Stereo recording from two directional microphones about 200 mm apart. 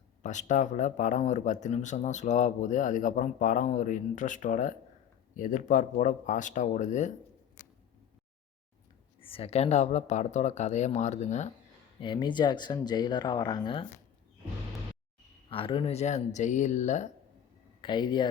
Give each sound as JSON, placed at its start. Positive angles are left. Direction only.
{"t": 0.2, "sound": "speech", "side_deg": 35}
{"t": 9.2, "sound": "speech", "side_deg": 30}
{"t": 11.9, "sound": "speech", "side_deg": 25}
{"t": 15.4, "sound": "speech", "side_deg": 25}
{"t": 17.7, "sound": "speech", "side_deg": 25}